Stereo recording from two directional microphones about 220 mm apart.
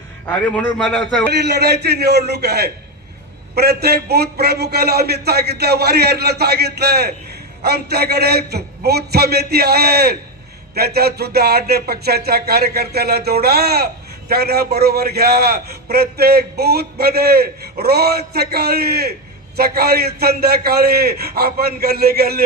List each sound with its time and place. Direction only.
0.3 s a man's voice: 5° left (ahead or behind)
1.3 s a man's voice: 50° right (ahead or behind)